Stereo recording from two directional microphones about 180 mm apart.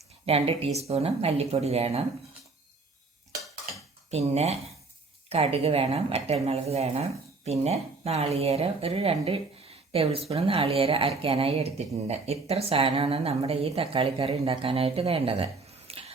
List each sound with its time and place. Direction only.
0.3 s a woman's voice: 35° right (ahead or behind)
4.1 s a woman's voice: 35° right (ahead or behind)